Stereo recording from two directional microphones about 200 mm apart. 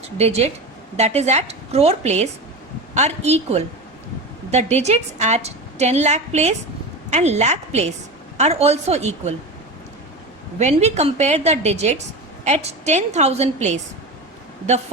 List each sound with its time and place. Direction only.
0.2 s a woman's voice: 30° right (ahead or behind)
10.6 s a woman's voice: 35° right (ahead or behind)